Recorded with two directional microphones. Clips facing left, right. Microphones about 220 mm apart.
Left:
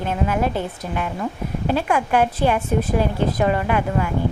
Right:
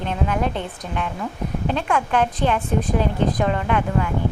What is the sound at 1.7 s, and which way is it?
A woman's voice, 10° left (ahead or behind).